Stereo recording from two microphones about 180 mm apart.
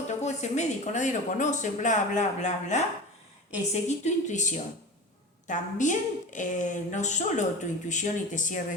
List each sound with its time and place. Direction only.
0.2 s a woman's voice: 40° left (ahead or behind)
3.8 s a woman's voice: 40° left (ahead or behind)